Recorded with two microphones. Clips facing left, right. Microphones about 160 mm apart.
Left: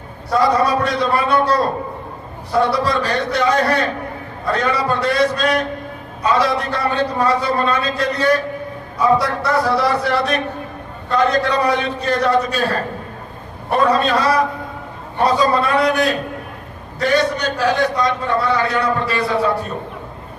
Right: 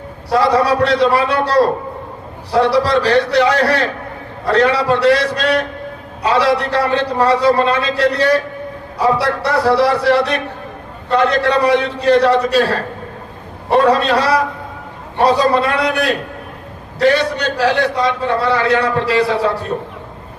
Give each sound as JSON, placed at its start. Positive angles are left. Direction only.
{"t": 0.3, "sound": "a man's voice", "side_deg": -70}